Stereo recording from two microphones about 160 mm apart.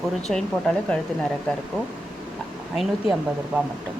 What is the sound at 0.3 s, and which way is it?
Speech, 5° left (ahead or behind).